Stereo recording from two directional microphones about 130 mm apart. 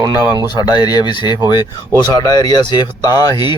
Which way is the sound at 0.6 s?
30° left (ahead or behind).